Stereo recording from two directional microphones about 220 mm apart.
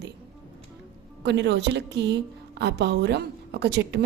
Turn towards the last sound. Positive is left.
turn(degrees=-50)  # may be behind; listen again after turning